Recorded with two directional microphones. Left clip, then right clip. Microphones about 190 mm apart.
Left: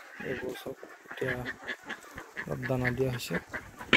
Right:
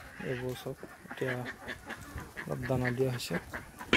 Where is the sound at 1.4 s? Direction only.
50° left (ahead or behind).